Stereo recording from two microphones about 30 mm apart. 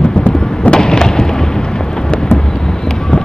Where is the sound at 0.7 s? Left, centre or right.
Left.